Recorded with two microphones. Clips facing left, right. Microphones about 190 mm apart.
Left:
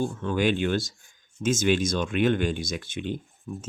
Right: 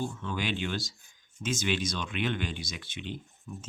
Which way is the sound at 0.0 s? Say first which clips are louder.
Left 9 dB; 50° left (ahead or behind).